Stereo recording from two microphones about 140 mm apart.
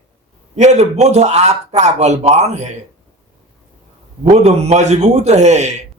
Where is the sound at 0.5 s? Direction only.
55° right (ahead or behind).